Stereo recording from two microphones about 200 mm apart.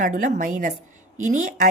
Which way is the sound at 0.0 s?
40° right (ahead or behind).